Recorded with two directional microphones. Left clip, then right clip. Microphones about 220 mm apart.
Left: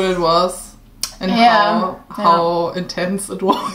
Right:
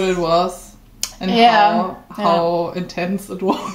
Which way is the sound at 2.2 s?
15° left (ahead or behind).